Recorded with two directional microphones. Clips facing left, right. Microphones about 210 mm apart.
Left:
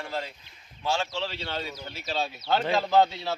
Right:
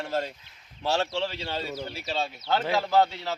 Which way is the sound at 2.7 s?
15° left (ahead or behind).